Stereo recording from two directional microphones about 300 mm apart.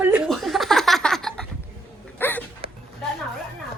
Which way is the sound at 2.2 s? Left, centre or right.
Centre.